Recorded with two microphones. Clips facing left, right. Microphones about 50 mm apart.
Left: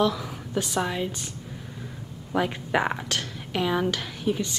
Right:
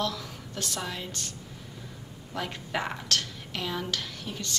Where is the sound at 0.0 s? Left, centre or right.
Centre.